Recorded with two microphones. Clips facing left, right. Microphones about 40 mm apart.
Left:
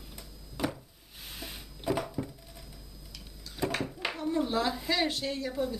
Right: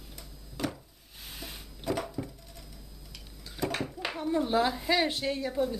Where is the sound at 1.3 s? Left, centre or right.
Centre.